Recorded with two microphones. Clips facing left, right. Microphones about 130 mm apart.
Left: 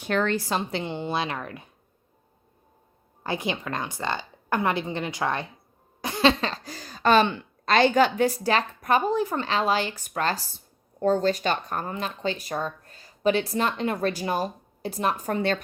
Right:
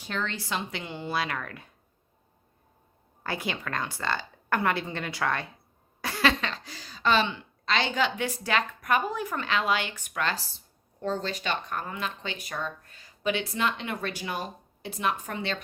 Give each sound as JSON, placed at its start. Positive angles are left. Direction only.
{"t": 0.0, "sound": "speech", "side_deg": 60}
{"t": 3.2, "sound": "a woman's voice", "side_deg": 20}
{"t": 6.0, "sound": "a sound", "side_deg": 20}
{"t": 6.4, "sound": "speech", "side_deg": 40}